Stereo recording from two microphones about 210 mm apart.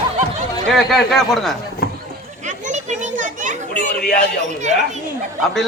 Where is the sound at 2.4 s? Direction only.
35° right (ahead or behind).